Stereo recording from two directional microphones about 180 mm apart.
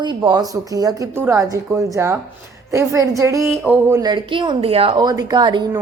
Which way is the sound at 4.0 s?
25° right (ahead or behind).